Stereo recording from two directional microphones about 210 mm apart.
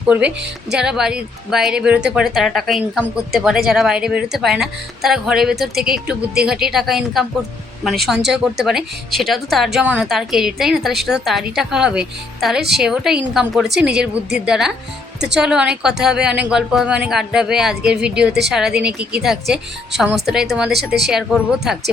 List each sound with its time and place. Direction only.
0.1 s speech: 5° right (ahead or behind)
20.7 s speech: 50° right (ahead or behind)
21.1 s speech: centre (ahead or behind)